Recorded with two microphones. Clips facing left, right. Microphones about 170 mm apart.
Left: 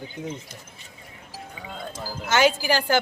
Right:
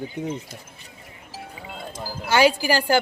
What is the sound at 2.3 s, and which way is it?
Speech, 10° right (ahead or behind).